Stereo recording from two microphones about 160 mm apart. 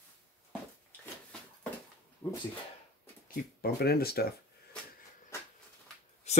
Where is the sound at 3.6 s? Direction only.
75° left (ahead or behind).